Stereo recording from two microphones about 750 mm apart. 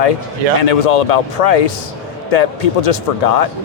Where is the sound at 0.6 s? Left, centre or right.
Left.